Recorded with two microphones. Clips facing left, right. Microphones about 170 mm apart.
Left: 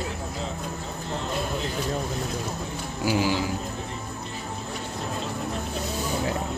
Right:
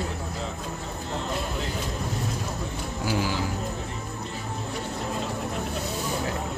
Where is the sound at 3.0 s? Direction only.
10° left (ahead or behind).